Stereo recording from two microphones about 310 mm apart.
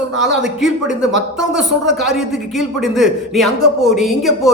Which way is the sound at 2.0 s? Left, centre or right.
Centre.